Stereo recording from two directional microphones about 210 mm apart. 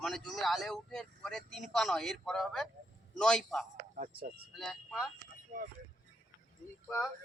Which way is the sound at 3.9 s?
40° right (ahead or behind).